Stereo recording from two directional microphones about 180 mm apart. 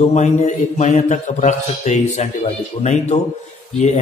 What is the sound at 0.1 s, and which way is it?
A man's voice, 40° left (ahead or behind).